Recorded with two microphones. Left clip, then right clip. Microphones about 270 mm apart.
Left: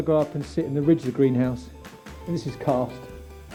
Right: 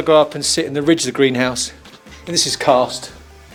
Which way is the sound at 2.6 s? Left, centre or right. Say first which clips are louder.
Right 10 dB; right.